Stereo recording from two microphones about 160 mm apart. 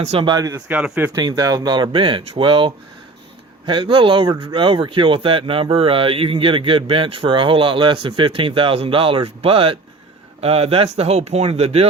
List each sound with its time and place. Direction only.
0.0 s speech: 35° right (ahead or behind)
0.3 s speech: 20° right (ahead or behind)
0.7 s speech: 5° right (ahead or behind)
1.2 s speech: 25° right (ahead or behind)